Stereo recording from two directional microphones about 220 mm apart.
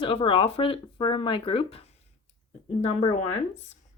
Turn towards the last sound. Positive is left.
turn(degrees=25)  # may be behind; listen again after turning